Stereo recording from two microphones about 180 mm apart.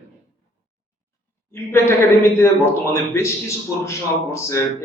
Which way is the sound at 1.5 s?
15° left (ahead or behind).